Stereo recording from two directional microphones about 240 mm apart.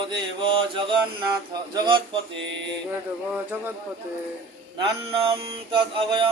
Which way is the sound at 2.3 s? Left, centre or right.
Right.